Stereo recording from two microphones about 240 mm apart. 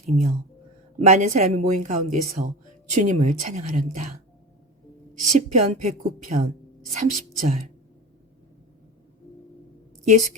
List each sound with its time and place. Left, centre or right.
0.0 s speech: right
5.2 s speech: right